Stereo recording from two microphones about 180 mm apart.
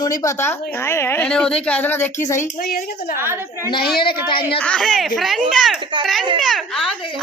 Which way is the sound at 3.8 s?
60° left (ahead or behind).